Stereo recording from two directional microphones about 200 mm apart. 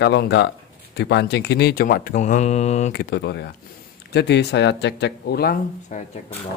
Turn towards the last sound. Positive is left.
turn(degrees=35)  # may be behind; listen again after turning